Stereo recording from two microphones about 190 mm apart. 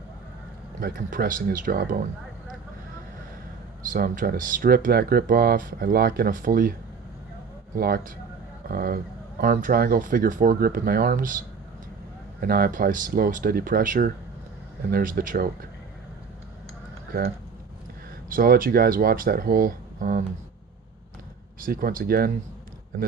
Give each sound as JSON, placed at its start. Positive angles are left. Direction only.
{"t": 0.8, "sound": "speech", "side_deg": -45}
{"t": 3.9, "sound": "speech", "side_deg": -50}
{"t": 7.8, "sound": "speech", "side_deg": -50}
{"t": 12.4, "sound": "speech", "side_deg": -50}
{"t": 18.3, "sound": "speech", "side_deg": -50}
{"t": 21.6, "sound": "speech", "side_deg": -50}